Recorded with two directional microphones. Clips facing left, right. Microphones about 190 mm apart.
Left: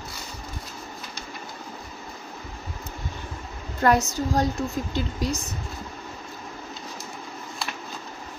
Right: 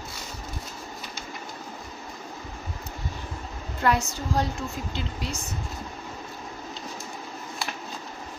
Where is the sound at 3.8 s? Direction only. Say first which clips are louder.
Left 4 dB; 40° left (ahead or behind).